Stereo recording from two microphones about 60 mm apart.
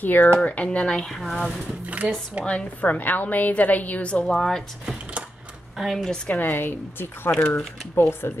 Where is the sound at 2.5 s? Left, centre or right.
Left.